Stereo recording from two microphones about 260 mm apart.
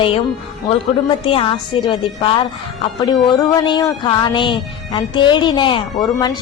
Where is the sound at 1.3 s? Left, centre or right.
Centre.